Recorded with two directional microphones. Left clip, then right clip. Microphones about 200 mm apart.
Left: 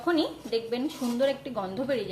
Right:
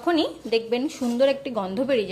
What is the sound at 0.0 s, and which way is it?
A woman's voice, 30° right (ahead or behind).